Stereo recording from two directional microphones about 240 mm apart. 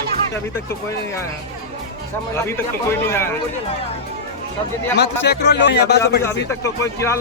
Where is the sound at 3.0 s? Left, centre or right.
Centre.